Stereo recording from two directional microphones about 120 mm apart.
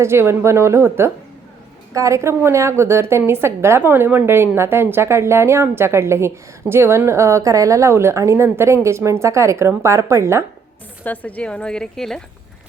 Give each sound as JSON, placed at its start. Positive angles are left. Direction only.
{"t": 0.0, "sound": "a woman's voice", "side_deg": -20}
{"t": 11.0, "sound": "speech", "side_deg": 15}